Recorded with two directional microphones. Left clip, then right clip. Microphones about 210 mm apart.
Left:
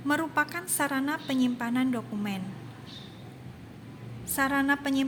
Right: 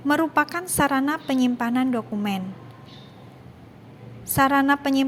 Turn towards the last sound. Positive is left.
turn(degrees=-25)  # may be behind; listen again after turning